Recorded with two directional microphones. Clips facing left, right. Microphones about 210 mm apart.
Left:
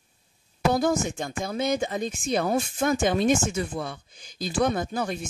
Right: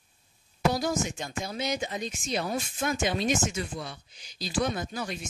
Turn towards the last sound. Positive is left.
turn(degrees=50)  # may be behind; listen again after turning